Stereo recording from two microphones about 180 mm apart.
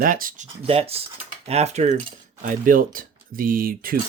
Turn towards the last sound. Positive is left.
turn(degrees=-55)  # may be behind; listen again after turning